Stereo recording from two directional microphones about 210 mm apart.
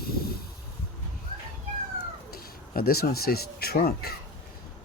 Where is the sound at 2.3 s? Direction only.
45° left (ahead or behind).